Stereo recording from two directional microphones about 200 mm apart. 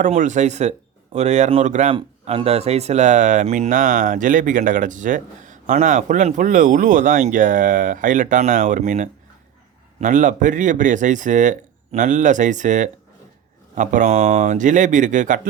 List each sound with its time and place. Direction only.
0.0 s speech: 40° right (ahead or behind)